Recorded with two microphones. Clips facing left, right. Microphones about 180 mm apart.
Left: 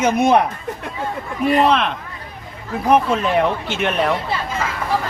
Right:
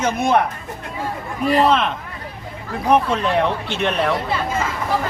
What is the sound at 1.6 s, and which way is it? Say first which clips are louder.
Speech: right 1 dB; centre (ahead or behind).